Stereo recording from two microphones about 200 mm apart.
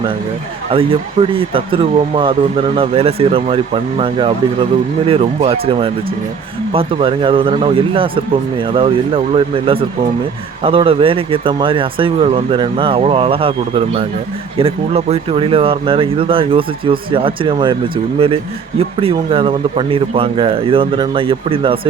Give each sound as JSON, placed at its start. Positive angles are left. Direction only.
{"t": 0.7, "sound": "speech", "side_deg": -25}